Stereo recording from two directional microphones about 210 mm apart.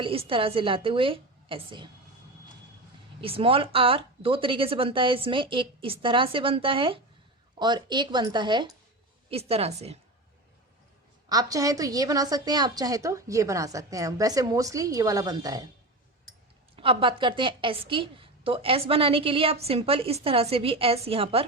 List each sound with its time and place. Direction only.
0.0 s a woman's voice: 25° right (ahead or behind)
3.2 s a woman's voice: 25° right (ahead or behind)
11.3 s a woman's voice: 15° right (ahead or behind)
16.7 s a woman's voice: 25° right (ahead or behind)